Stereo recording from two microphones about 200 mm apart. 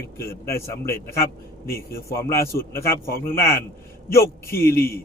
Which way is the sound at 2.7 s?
15° left (ahead or behind).